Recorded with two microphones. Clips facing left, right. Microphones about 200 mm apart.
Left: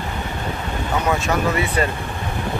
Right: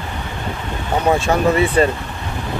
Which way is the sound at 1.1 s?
30° right (ahead or behind).